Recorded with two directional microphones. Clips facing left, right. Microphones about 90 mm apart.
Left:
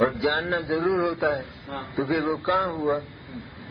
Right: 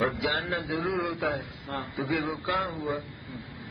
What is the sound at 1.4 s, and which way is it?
Speech, centre (ahead or behind).